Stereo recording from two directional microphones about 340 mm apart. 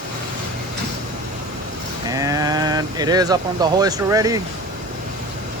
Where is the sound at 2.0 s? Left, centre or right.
Centre.